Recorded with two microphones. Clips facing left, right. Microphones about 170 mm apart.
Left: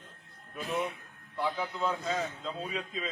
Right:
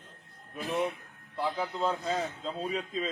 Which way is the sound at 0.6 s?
30° right (ahead or behind).